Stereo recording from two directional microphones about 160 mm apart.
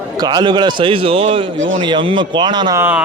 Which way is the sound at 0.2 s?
25° right (ahead or behind).